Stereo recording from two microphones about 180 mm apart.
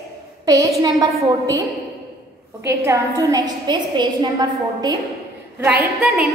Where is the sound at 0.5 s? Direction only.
20° right (ahead or behind).